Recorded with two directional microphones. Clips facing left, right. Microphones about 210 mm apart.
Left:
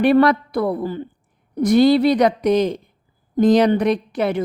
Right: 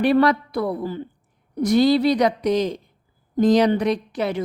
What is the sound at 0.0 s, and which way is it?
A woman's voice, 55° left (ahead or behind).